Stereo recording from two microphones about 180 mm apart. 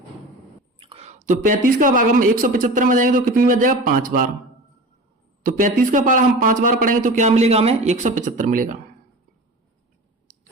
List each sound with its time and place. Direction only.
0.8 s a woman's voice: 35° right (ahead or behind); by 4.3 s 50° right (ahead or behind)
5.4 s a woman's voice: 50° right (ahead or behind)